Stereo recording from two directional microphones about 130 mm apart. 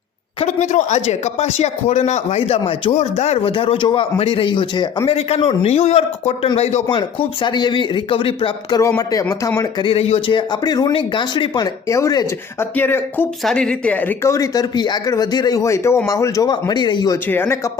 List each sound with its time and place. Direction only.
0.3 s speech: 65° left (ahead or behind); by 5.1 s 35° left (ahead or behind)
5.1 s speech: 45° left (ahead or behind)
5.7 s speech: 60° left (ahead or behind)
6.8 s speech: 35° left (ahead or behind)
9.8 s speech: 50° left (ahead or behind); by 13.2 s 15° left (ahead or behind)
13.4 s speech: 5° left (ahead or behind); by 17.2 s 35° left (ahead or behind)
17.2 s speech: 15° left (ahead or behind)